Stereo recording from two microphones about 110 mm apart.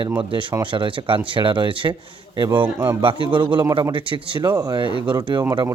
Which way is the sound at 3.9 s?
50° right (ahead or behind).